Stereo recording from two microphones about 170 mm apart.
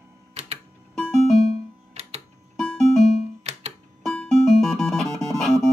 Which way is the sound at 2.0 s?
35° right (ahead or behind).